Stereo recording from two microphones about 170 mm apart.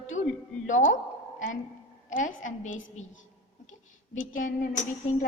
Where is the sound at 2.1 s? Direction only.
50° left (ahead or behind).